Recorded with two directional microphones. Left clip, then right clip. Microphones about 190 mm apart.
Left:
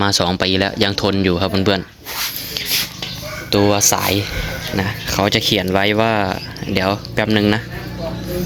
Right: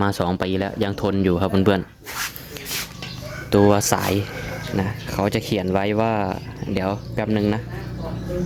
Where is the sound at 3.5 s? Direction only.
20° right (ahead or behind).